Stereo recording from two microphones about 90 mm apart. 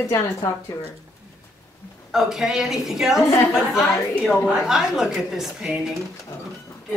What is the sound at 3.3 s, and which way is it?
Speech, 35° left (ahead or behind).